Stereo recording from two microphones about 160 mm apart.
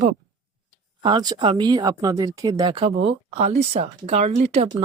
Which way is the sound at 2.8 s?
40° right (ahead or behind).